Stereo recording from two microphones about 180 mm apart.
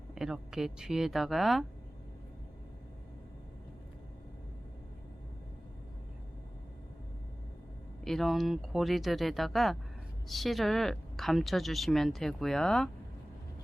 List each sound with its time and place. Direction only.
0.1 s a woman's voice: 5° right (ahead or behind)
8.0 s a woman's voice: centre (ahead or behind)